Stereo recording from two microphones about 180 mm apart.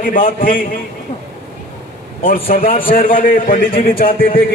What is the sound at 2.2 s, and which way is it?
A man's voice, 50° left (ahead or behind).